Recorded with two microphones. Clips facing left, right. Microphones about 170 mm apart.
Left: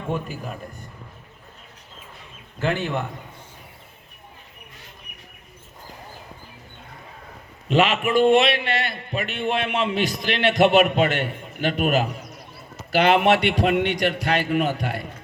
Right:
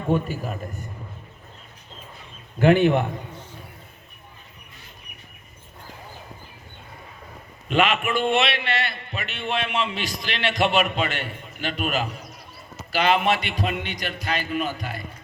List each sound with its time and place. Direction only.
0.1 s a man's voice: centre (ahead or behind)
2.6 s a man's voice: 15° right (ahead or behind)
7.7 s a man's voice: 35° left (ahead or behind); by 15.0 s 70° left (ahead or behind)